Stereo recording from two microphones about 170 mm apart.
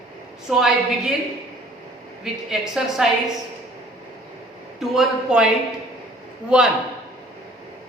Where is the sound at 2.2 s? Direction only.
5° right (ahead or behind).